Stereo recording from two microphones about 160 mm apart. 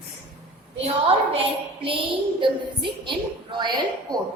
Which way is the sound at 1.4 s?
35° right (ahead or behind).